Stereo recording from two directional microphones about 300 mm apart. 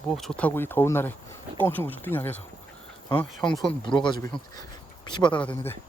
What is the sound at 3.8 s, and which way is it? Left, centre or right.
Speech, centre.